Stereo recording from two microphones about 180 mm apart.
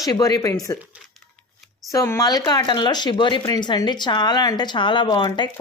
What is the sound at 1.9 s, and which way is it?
Speech, 15° left (ahead or behind).